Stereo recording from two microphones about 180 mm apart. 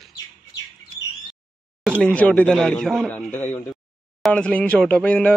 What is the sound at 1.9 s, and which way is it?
Speech, 5° left (ahead or behind).